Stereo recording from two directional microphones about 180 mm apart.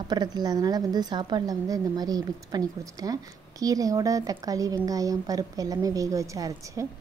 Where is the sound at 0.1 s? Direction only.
25° right (ahead or behind).